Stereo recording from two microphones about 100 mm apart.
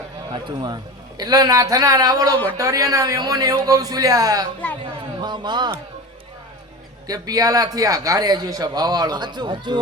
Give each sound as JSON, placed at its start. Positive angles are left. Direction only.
{"t": 0.4, "sound": "a man's voice", "side_deg": -45}
{"t": 4.9, "sound": "speech", "side_deg": -45}
{"t": 7.1, "sound": "a man's voice", "side_deg": -40}